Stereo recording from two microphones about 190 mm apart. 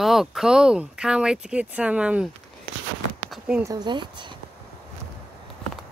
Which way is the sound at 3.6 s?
20° right (ahead or behind).